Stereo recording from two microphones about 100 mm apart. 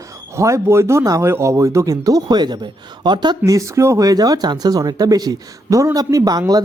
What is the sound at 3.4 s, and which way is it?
Speech, 30° right (ahead or behind).